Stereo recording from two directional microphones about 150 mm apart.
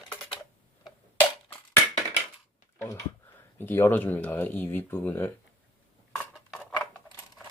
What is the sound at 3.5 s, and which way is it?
Speech, 15° left (ahead or behind).